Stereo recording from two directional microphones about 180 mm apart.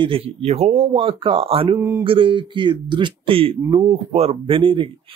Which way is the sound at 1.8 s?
15° right (ahead or behind).